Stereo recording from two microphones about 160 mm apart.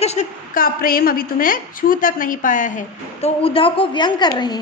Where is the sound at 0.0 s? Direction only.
45° left (ahead or behind).